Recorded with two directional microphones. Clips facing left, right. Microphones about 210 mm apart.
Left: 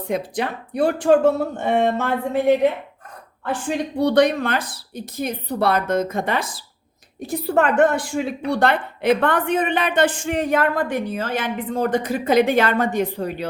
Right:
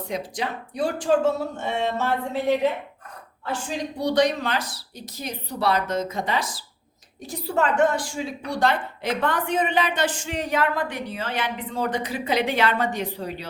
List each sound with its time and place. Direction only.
0.1 s speech: 60° left (ahead or behind)
3.4 s a woman's voice: 60° left (ahead or behind)